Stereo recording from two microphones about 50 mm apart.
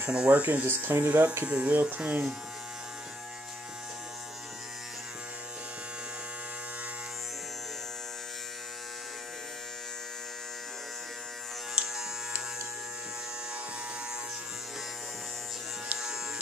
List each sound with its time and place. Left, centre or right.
0.1 s speech: centre
0.4 s speech: right
0.7 s speech: right
1.4 s speech: right